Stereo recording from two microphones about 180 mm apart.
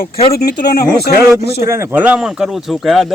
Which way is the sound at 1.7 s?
10° right (ahead or behind).